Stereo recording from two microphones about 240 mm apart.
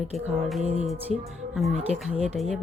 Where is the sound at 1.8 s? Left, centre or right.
Right.